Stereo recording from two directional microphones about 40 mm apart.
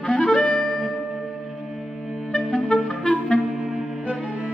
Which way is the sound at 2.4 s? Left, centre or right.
Right.